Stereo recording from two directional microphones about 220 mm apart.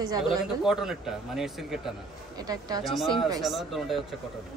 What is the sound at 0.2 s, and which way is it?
Speech, centre (ahead or behind).